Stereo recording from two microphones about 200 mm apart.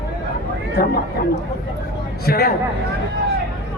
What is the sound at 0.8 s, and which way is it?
Speech, 45° left (ahead or behind).